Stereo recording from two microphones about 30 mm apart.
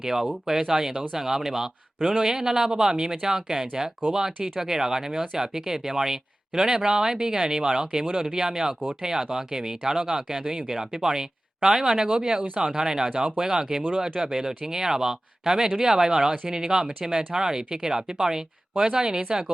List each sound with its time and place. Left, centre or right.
0.0 s speech: centre
2.0 s speech: right